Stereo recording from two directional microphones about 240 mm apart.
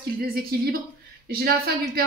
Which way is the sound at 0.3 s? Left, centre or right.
Right.